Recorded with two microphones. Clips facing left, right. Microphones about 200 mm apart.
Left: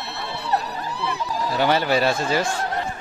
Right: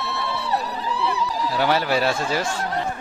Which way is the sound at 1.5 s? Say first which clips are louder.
Left 2 dB; 5° right (ahead or behind).